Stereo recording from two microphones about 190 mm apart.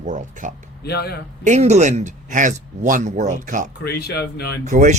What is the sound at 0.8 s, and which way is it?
Speech, 55° left (ahead or behind).